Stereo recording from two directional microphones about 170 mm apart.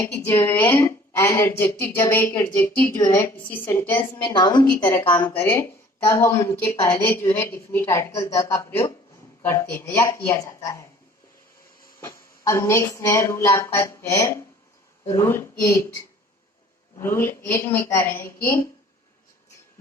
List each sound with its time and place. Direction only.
0.3 s a woman's voice: 15° left (ahead or behind)
4.3 s a woman's voice: 25° left (ahead or behind)
5.2 s a woman's voice: 10° left (ahead or behind)
11.9 s a woman's voice: 15° left (ahead or behind)
17.0 s a woman's voice: 15° left (ahead or behind)